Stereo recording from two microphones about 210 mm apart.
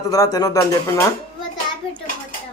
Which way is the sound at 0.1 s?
15° left (ahead or behind).